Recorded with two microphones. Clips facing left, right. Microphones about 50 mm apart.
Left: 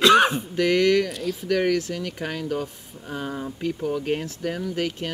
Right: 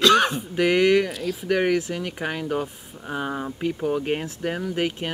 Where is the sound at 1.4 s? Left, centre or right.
Centre.